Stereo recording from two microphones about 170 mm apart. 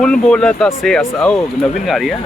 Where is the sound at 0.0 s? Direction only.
5° left (ahead or behind).